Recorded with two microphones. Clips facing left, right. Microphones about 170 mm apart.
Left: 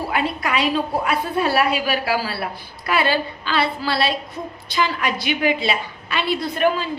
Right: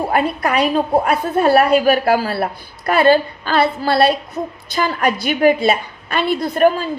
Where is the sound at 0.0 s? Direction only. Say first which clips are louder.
Right 5 dB; 45° right (ahead or behind).